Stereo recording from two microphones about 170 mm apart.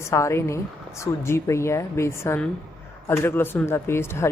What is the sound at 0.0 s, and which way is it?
Speech, 15° left (ahead or behind).